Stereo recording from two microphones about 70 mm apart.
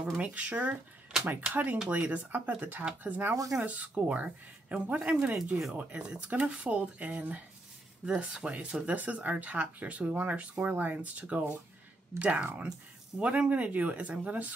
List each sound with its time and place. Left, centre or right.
0.2 s speech: centre